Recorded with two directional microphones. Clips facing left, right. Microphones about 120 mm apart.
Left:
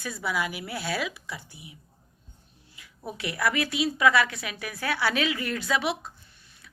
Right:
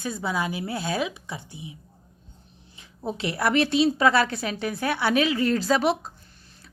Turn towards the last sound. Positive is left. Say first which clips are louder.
# right 5 dB
turn(degrees=-40)  # may be behind; listen again after turning